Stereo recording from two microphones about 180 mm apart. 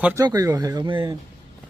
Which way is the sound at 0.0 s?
10° right (ahead or behind).